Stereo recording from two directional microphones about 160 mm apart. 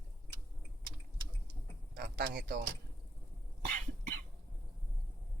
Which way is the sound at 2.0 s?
75° right (ahead or behind).